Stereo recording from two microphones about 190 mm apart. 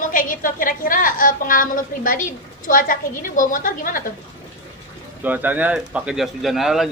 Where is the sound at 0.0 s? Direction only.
45° left (ahead or behind).